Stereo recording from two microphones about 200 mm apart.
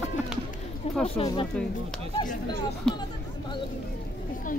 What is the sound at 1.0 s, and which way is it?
Speech, 25° left (ahead or behind).